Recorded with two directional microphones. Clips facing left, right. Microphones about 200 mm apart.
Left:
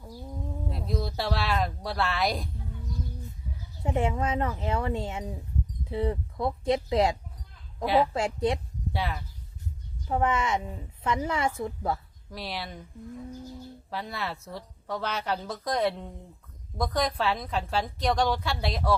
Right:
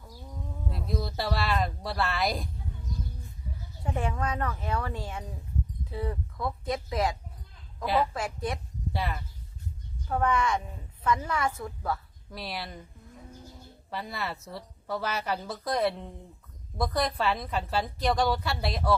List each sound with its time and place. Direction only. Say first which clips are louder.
0.9 s a woman's voice: left 1 dB; centre (ahead or behind)
3.8 s speech: left 4 dB; 25° left (ahead or behind)
7.9 s a woman's voice: left 3 dB; centre (ahead or behind)
8.1 s speech: left 6 dB; 25° left (ahead or behind)
8.9 s speech: left 1 dB; centre (ahead or behind)
10.1 s speech: left 1 dB; 20° left (ahead or behind)
12.3 s a woman's voice: left 1 dB; centre (ahead or behind)
13.9 s a woman's voice: left 1 dB; centre (ahead or behind)